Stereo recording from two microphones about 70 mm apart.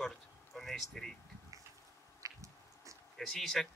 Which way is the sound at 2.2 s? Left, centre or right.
Right.